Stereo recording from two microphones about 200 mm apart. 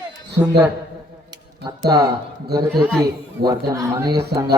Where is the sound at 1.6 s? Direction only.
20° right (ahead or behind).